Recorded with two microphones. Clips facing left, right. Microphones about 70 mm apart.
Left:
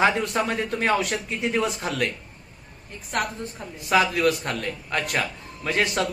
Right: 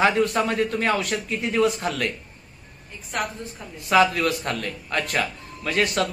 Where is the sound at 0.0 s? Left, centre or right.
Centre.